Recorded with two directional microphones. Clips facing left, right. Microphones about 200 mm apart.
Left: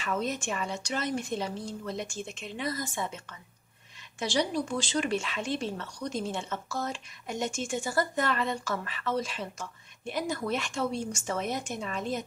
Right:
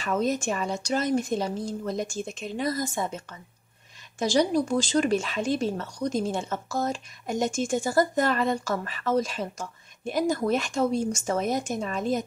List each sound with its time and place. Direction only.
0.0 s speech: 40° right (ahead or behind)
4.2 s speech: 40° right (ahead or behind)